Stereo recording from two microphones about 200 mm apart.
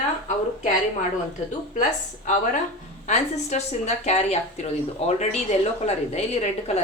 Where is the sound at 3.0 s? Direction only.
35° left (ahead or behind).